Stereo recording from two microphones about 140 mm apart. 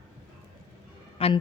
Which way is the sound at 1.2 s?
40° left (ahead or behind).